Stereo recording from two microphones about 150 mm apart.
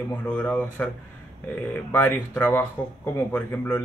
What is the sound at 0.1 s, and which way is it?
Speech, 10° left (ahead or behind).